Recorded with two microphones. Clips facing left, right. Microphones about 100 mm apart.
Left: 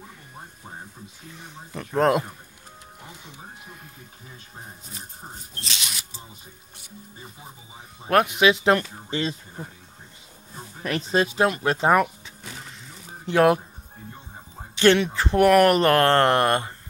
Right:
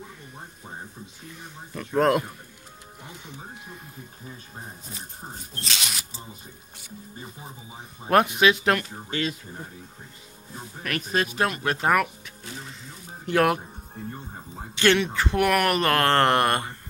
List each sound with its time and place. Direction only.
2.0 s speech: 10° left (ahead or behind)
5.6 s speech: 40° right (ahead or behind)
8.3 s speech: 15° left (ahead or behind)
8.7 s speech: 30° left (ahead or behind)
10.8 s speech: 25° left (ahead or behind)
13.3 s speech: 15° left (ahead or behind)
14.8 s speech: 25° left (ahead or behind)
16.1 s speech: 5° left (ahead or behind)